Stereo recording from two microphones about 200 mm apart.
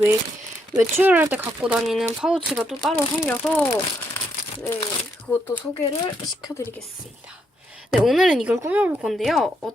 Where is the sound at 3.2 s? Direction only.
10° left (ahead or behind).